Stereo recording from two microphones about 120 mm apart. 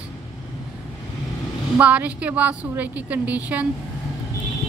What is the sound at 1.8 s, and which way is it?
Speech, 10° right (ahead or behind).